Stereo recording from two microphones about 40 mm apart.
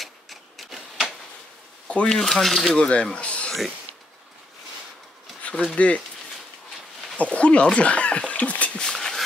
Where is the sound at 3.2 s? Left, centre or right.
Left.